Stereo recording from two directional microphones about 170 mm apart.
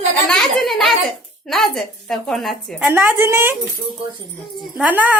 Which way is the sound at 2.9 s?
10° right (ahead or behind).